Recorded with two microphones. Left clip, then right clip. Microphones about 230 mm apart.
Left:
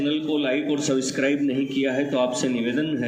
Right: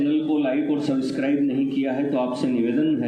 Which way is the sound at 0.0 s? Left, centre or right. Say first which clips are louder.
Right 2 dB; left.